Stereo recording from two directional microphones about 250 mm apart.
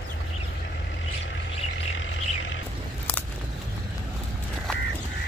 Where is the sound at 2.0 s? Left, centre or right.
Left.